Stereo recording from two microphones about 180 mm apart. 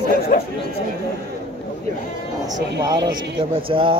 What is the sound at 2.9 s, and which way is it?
Speech, 25° right (ahead or behind).